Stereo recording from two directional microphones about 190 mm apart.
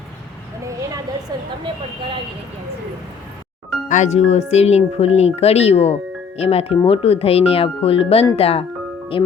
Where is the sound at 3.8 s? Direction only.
40° left (ahead or behind).